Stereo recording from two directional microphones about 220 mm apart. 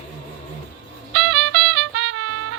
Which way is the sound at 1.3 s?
90° right.